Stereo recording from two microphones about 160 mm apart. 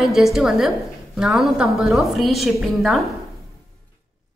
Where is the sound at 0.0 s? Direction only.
Centre (ahead or behind).